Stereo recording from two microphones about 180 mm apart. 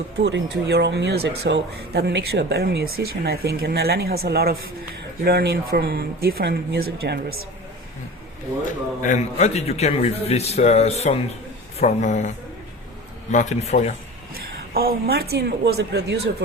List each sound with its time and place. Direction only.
0.3 s speech: 75° right (ahead or behind)
9.0 s a man's voice: 40° left (ahead or behind)
13.3 s a man's voice: 40° left (ahead or behind)
14.3 s speech: 55° right (ahead or behind)